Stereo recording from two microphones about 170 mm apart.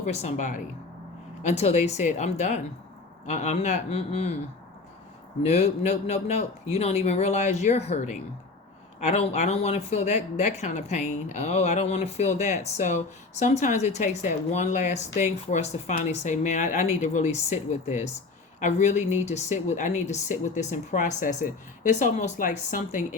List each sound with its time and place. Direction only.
0.0 s speech: 40° left (ahead or behind)
5.4 s speech: 40° left (ahead or behind)